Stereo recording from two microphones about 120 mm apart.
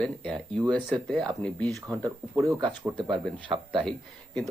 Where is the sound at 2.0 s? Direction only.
25° right (ahead or behind).